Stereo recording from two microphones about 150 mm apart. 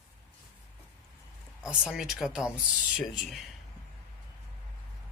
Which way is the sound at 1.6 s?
5° right (ahead or behind).